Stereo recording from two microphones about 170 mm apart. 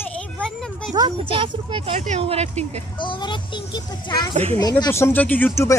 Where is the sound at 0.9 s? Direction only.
25° right (ahead or behind).